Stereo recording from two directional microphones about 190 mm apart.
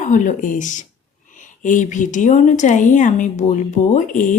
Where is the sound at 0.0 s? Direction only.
40° left (ahead or behind).